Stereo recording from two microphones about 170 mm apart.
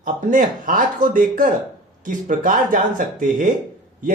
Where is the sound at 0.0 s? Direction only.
50° right (ahead or behind).